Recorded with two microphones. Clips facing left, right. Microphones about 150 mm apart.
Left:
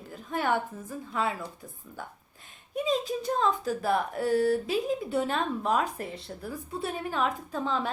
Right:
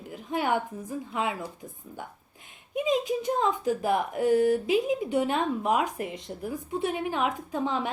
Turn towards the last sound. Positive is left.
turn(degrees=-15)  # may be behind; listen again after turning